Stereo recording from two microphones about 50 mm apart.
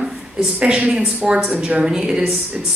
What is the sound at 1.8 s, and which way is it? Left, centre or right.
Speech, centre.